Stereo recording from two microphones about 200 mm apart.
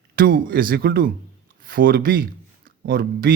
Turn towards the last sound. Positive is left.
turn(degrees=-50)  # may be behind; listen again after turning